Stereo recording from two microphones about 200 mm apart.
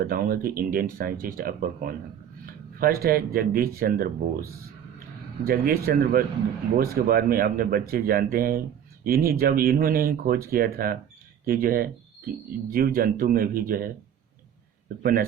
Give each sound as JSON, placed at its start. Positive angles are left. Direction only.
{"t": 0.0, "sound": "speech", "side_deg": -45}
{"t": 5.5, "sound": "speech", "side_deg": -50}